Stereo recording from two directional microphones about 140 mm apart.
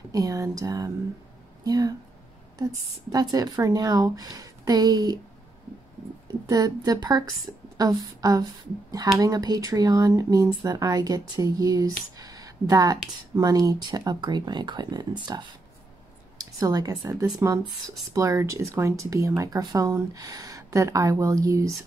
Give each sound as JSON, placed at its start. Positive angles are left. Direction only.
{"t": 0.1, "sound": "speech", "side_deg": -25}
{"t": 3.1, "sound": "speech", "side_deg": -30}
{"t": 6.5, "sound": "a woman's voice", "side_deg": -25}